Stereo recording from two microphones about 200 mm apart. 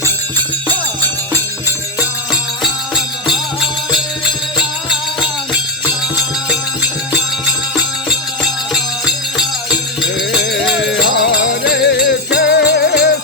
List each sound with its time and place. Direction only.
8.7 s music: 5° right (ahead or behind)
10.0 s music: 60° left (ahead or behind)